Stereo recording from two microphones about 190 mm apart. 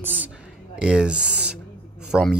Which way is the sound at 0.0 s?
10° right (ahead or behind).